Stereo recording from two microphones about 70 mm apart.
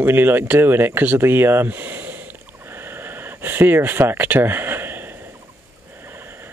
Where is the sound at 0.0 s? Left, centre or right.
Right.